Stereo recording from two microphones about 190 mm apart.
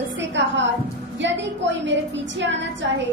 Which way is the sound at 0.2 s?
70° right (ahead or behind).